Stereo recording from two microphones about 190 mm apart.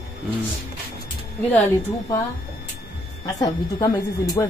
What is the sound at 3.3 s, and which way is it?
Speech, 20° left (ahead or behind).